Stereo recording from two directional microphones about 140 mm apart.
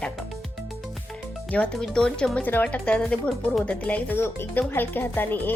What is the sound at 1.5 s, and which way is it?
Speech, 5° left (ahead or behind).